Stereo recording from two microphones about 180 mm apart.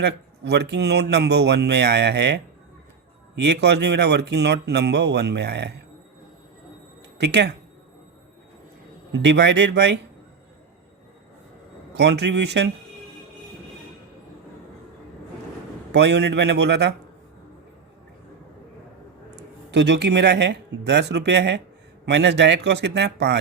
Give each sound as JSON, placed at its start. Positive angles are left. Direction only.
{"t": 0.0, "sound": "speech", "side_deg": -65}
{"t": 7.2, "sound": "speech", "side_deg": -70}
{"t": 9.1, "sound": "speech", "side_deg": -75}
{"t": 11.9, "sound": "speech", "side_deg": -70}
{"t": 15.9, "sound": "speech", "side_deg": -70}
{"t": 19.4, "sound": "speech", "side_deg": -75}